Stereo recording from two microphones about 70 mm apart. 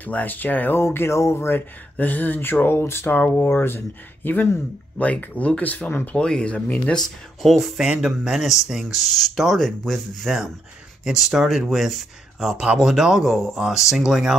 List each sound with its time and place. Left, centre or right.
0.0 s speech: left
0.8 s speech: left
3.1 s speech: left
6.1 s speech: centre
7.4 s speech: centre